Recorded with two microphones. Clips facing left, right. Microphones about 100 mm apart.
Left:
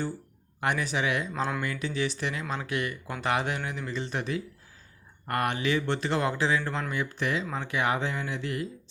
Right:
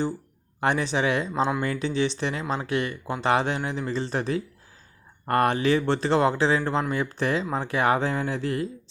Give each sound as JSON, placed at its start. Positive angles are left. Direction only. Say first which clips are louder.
{"t": 0.6, "sound": "speech", "louder": "right 4 dB", "side_deg": -30}